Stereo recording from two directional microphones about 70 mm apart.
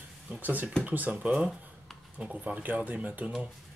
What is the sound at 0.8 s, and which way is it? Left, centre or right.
Speech, right.